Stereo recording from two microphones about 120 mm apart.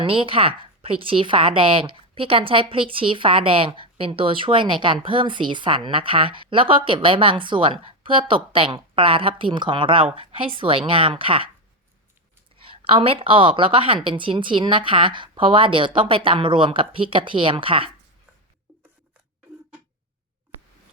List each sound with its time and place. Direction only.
0.0 s a woman's voice: 45° right (ahead or behind)
12.6 s a woman's voice: 50° right (ahead or behind)